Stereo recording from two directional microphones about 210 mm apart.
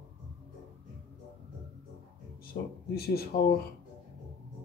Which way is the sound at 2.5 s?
40° left (ahead or behind).